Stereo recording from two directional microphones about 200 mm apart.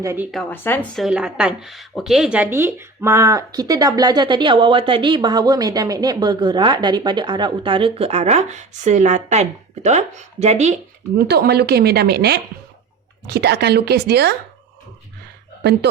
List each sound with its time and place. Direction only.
0.0 s speech: 15° right (ahead or behind)
0.3 s speech: 5° left (ahead or behind); by 10.8 s 35° right (ahead or behind)
11.2 s a woman's voice: 55° right (ahead or behind)